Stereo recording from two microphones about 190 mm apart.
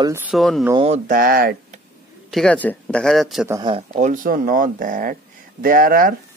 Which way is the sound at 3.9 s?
45° right (ahead or behind).